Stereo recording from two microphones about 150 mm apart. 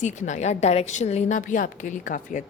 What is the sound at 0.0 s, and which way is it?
A woman's voice, 55° left (ahead or behind).